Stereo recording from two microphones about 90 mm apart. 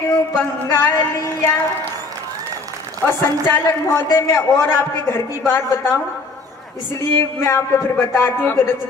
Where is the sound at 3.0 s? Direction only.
25° left (ahead or behind).